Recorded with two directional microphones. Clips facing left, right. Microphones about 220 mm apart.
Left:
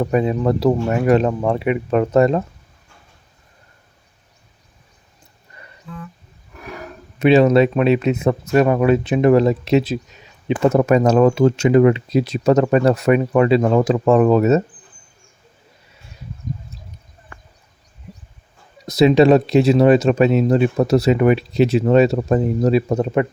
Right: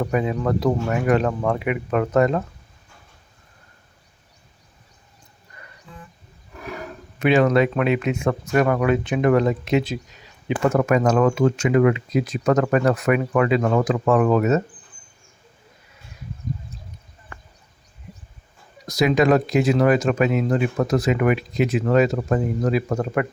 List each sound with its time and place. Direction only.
0.0 s speech: 30° left (ahead or behind)
7.2 s speech: 20° left (ahead or behind)
18.9 s speech: 25° left (ahead or behind)